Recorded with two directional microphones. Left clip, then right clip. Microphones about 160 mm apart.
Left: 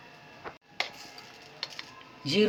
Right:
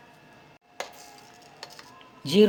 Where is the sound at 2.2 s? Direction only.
90° right.